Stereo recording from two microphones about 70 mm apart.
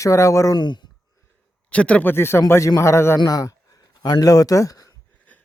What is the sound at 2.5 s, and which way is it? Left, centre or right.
Speech, left.